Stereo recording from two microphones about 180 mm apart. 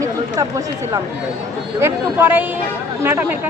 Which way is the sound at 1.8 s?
10° right (ahead or behind).